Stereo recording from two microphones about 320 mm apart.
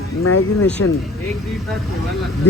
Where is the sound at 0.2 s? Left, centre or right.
Left.